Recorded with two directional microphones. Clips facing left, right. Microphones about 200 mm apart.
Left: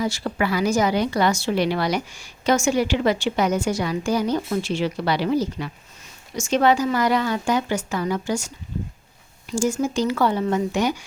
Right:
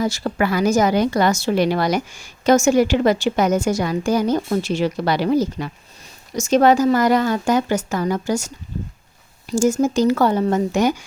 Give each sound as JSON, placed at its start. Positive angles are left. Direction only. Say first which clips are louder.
{"t": 0.0, "sound": "a woman's voice", "louder": "right 3 dB", "side_deg": -40}